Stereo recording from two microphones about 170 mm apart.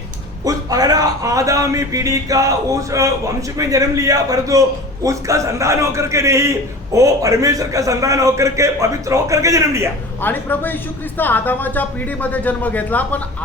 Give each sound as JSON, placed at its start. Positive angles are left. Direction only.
{"t": 0.4, "sound": "a man's voice", "side_deg": -20}
{"t": 10.2, "sound": "speech", "side_deg": 10}